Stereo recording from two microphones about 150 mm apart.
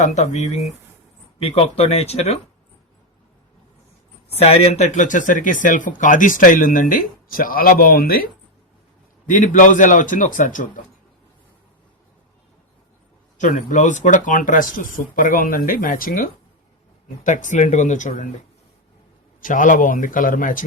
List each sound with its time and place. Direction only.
0.0 s speech: 50° left (ahead or behind)
4.3 s speech: 45° left (ahead or behind); by 8.3 s 80° left
9.2 s speech: 60° left (ahead or behind)
13.4 s speech: 60° left (ahead or behind)
17.2 s speech: 55° left (ahead or behind)
19.4 s speech: 60° left (ahead or behind)